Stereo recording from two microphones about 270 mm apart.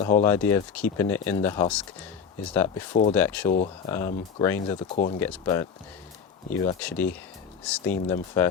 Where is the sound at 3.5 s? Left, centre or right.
Left.